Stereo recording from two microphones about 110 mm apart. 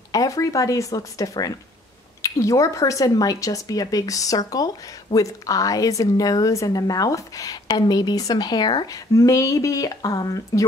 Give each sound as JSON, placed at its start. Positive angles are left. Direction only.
{"t": 0.1, "sound": "speech", "side_deg": 30}
{"t": 9.1, "sound": "speech", "side_deg": 30}